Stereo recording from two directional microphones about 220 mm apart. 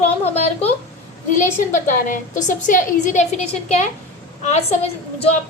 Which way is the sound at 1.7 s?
35° left (ahead or behind).